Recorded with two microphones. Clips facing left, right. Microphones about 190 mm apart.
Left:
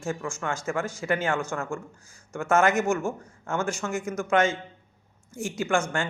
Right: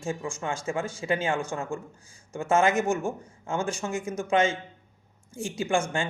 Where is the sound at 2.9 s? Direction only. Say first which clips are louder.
Left 1 dB; 15° right (ahead or behind).